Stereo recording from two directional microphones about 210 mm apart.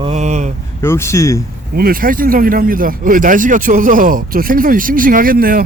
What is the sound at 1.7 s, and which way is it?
Speech, 45° right (ahead or behind).